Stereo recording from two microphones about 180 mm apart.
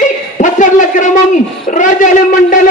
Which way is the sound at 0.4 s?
45° left (ahead or behind).